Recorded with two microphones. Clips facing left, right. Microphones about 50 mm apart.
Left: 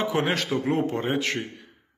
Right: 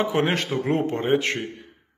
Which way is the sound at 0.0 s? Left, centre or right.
Right.